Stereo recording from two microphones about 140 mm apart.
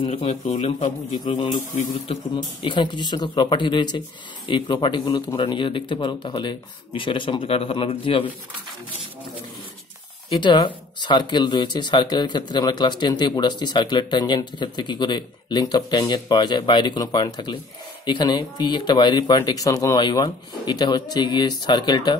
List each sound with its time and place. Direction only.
0.0 s speech: 45° left (ahead or behind)
0.8 s speech: 35° left (ahead or behind)
10.4 s speech: 35° left (ahead or behind)